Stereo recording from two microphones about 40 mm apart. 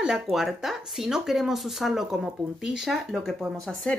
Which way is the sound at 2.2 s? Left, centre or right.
Centre.